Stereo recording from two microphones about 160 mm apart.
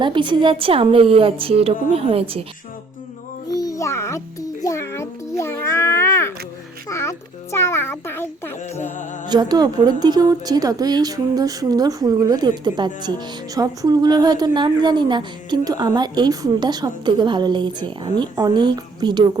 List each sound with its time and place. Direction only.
0.0 s a woman's voice: 30° right (ahead or behind)
3.5 s a sound: 20° left (ahead or behind)
9.3 s a woman's voice: 25° right (ahead or behind)